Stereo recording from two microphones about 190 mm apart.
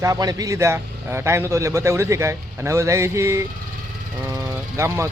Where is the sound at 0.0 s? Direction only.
20° right (ahead or behind).